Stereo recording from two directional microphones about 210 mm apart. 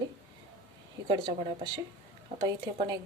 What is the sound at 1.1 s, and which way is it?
Speech, 20° right (ahead or behind).